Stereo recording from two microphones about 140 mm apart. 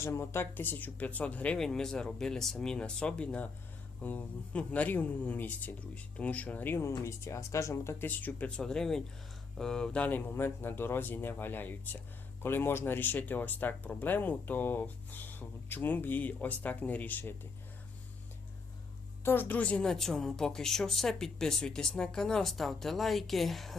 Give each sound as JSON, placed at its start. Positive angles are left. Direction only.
{"t": 0.0, "sound": "speech", "side_deg": 20}
{"t": 19.2, "sound": "a woman's voice", "side_deg": 15}